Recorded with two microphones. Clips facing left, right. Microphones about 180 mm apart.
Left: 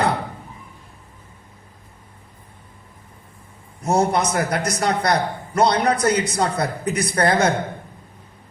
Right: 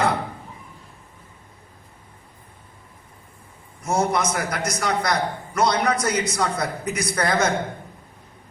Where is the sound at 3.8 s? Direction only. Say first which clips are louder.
Left 3 dB; 35° left (ahead or behind).